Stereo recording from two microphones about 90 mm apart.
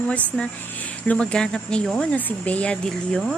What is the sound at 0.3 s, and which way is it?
Speech, centre (ahead or behind).